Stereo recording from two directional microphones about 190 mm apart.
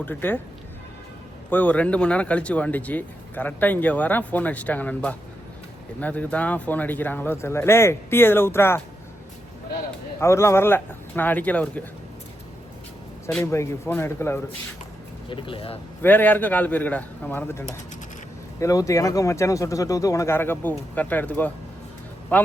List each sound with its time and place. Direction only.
0.0 s speech: 10° left (ahead or behind)
1.5 s speech: 10° left (ahead or behind)
10.2 s speech: 15° left (ahead or behind)
13.4 s speech: 15° left (ahead or behind)
15.3 s speech: 25° left (ahead or behind)
16.0 s speech: 10° left (ahead or behind)